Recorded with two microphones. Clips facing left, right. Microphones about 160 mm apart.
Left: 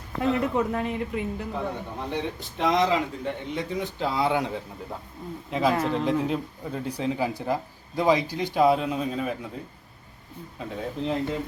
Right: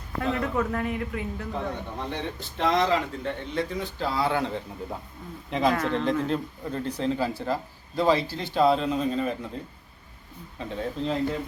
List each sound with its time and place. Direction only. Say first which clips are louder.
0.3 s speech: left 2 dB; 20° left (ahead or behind)
1.6 s speech: even; 10° left (ahead or behind)
10.6 s speech: right 1 dB; 10° left (ahead or behind)